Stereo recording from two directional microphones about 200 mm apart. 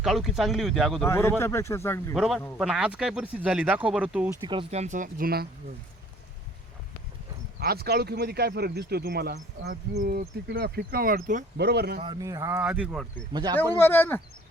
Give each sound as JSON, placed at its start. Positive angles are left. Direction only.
{"t": 0.0, "sound": "speech", "side_deg": 0}
{"t": 1.0, "sound": "speech", "side_deg": 10}
{"t": 2.1, "sound": "speech", "side_deg": 0}
{"t": 4.4, "sound": "speech", "side_deg": -30}
{"t": 7.6, "sound": "speech", "side_deg": -50}
{"t": 11.5, "sound": "speech", "side_deg": -55}
{"t": 12.0, "sound": "speech", "side_deg": -20}
{"t": 13.3, "sound": "speech", "side_deg": -20}
{"t": 13.7, "sound": "speech", "side_deg": 10}